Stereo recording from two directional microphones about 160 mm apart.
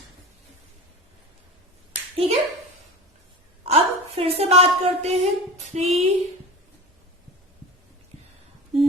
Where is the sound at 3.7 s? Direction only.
40° right (ahead or behind).